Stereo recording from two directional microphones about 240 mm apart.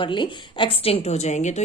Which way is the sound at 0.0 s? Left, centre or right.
Centre.